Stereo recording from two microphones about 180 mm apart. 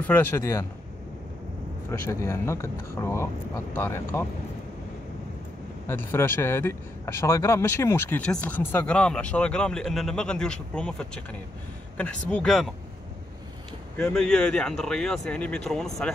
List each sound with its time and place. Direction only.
0.0 s speech: 10° left (ahead or behind)
1.9 s speech: 15° left (ahead or behind)
5.9 s speech: 15° left (ahead or behind)
13.9 s speech: 5° left (ahead or behind)